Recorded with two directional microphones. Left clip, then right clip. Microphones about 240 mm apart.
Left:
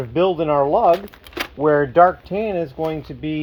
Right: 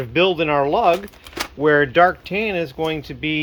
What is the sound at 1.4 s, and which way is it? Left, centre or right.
Speech, right.